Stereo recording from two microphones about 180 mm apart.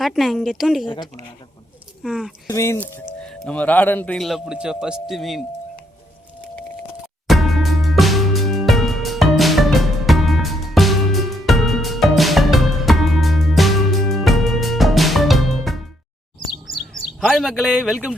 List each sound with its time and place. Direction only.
0.0 s speech: centre (ahead or behind)
2.0 s speech: 5° right (ahead or behind)
2.5 s speech: 15° left (ahead or behind); by 5.4 s centre (ahead or behind)
7.3 s music: centre (ahead or behind)
17.2 s speech: centre (ahead or behind)